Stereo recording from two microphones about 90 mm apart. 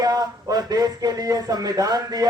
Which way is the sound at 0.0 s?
50° right (ahead or behind).